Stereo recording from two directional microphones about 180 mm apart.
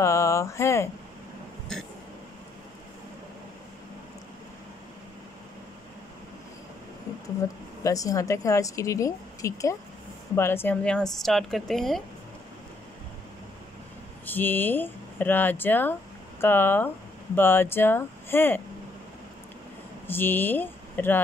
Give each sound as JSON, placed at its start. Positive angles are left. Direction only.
{"t": 0.0, "sound": "speech", "side_deg": 15}
{"t": 1.7, "sound": "vehicle", "side_deg": 5}
{"t": 7.8, "sound": "a woman's voice", "side_deg": 20}
{"t": 14.2, "sound": "a woman's voice", "side_deg": 10}
{"t": 20.1, "sound": "speech", "side_deg": 10}